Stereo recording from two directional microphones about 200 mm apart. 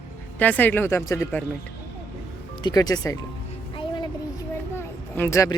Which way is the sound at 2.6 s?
20° left (ahead or behind).